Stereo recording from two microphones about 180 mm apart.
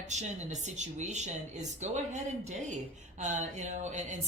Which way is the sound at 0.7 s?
40° right (ahead or behind).